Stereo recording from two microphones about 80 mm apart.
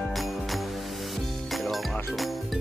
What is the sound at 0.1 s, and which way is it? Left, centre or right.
Music, centre.